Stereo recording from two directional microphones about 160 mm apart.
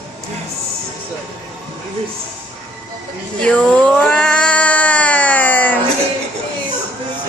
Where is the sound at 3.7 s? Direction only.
5° left (ahead or behind).